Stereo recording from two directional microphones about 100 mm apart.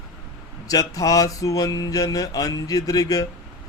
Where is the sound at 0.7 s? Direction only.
35° left (ahead or behind).